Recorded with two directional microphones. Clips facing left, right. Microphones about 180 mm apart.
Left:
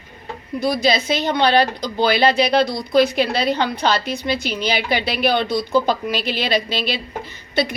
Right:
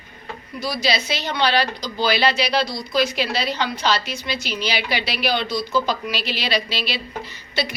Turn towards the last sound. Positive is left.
turn(degrees=50)  # may be behind; listen again after turning